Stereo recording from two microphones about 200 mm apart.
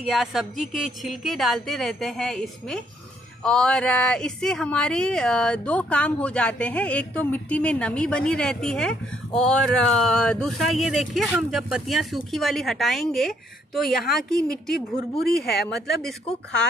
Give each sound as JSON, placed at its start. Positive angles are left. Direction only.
{"t": 0.0, "sound": "speech", "side_deg": 0}
{"t": 15.4, "sound": "speech", "side_deg": 55}
{"t": 15.7, "sound": "speech", "side_deg": 0}